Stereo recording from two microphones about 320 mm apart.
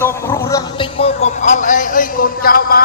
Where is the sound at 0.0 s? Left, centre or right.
Centre.